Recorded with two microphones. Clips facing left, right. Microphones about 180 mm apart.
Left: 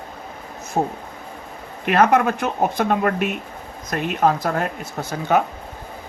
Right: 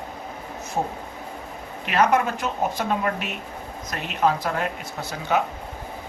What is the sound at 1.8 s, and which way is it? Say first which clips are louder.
Speech: left 4 dB; 55° left (ahead or behind).